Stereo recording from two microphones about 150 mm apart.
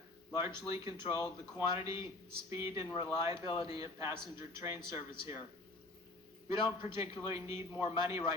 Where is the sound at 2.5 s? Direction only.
20° right (ahead or behind).